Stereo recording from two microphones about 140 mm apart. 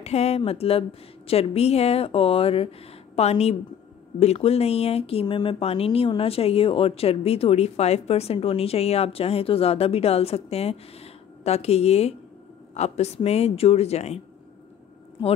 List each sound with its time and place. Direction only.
0.0 s speech: 50° left (ahead or behind)